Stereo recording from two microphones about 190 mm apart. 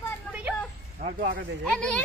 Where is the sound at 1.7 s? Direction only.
5° left (ahead or behind).